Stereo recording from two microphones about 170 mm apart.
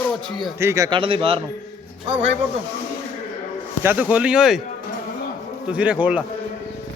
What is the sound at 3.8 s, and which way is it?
Speech, 10° right (ahead or behind).